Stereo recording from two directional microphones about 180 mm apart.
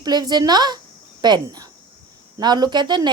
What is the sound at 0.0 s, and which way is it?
Speech, 20° right (ahead or behind).